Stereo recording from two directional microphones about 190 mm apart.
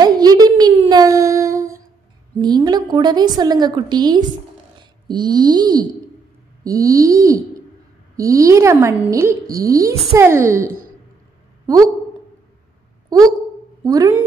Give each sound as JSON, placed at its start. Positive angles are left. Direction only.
{"t": 0.0, "sound": "humming", "side_deg": -20}
{"t": 2.4, "sound": "a woman's voice", "side_deg": -20}
{"t": 13.8, "sound": "a woman's voice", "side_deg": -20}